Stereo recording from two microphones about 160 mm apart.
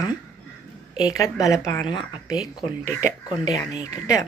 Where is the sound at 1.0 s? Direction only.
20° left (ahead or behind).